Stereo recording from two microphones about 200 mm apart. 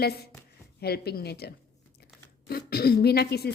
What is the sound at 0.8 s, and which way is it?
A woman's voice, 50° left (ahead or behind).